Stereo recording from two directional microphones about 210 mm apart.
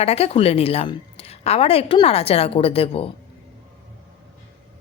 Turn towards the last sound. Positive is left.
turn(degrees=25)  # may be behind; listen again after turning